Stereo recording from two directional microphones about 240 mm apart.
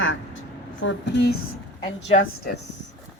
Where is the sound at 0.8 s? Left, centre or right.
Left.